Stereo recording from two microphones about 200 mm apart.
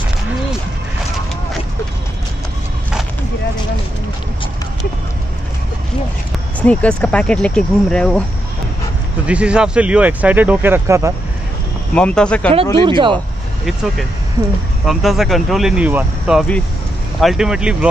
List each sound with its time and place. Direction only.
6.6 s speech: 5° left (ahead or behind)
9.2 s speech: 5° right (ahead or behind)
11.9 s speech: 5° left (ahead or behind)
12.7 s speech: 25° right (ahead or behind)
14.9 s speech: centre (ahead or behind)